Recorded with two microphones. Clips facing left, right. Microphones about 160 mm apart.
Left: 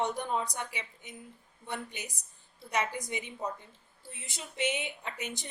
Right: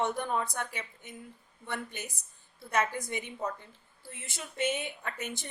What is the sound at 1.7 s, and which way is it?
A woman's voice, 15° left (ahead or behind).